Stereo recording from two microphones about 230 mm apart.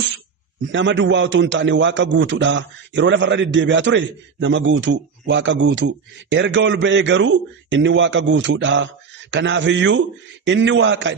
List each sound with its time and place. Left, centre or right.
0.7 s a man's voice: right